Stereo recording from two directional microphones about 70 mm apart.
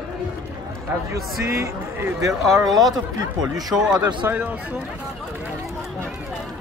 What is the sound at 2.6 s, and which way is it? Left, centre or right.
Speech, right.